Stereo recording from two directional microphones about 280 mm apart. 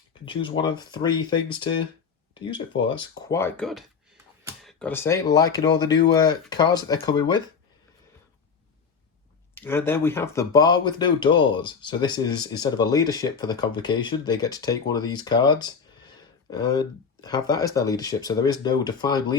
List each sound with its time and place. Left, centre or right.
0.1 s speech: centre
9.6 s speech: centre